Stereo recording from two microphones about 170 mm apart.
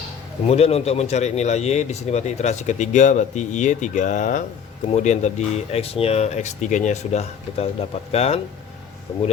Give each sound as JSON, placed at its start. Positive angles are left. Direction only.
{"t": 0.4, "sound": "speech", "side_deg": 40}
{"t": 9.1, "sound": "speech", "side_deg": 25}